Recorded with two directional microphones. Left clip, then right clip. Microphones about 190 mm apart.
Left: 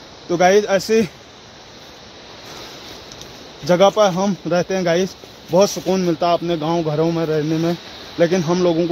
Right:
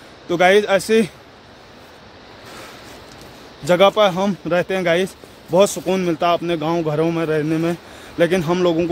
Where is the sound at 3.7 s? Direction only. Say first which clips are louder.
Even; 10° right (ahead or behind).